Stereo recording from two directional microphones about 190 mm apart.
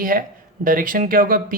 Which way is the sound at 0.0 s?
45° right (ahead or behind).